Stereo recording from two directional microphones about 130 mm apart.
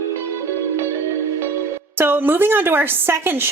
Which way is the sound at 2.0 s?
15° right (ahead or behind).